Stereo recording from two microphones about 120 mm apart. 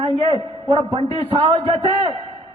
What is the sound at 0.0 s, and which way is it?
A man's voice, 50° right (ahead or behind).